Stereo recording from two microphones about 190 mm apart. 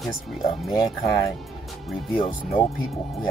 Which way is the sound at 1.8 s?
Centre (ahead or behind).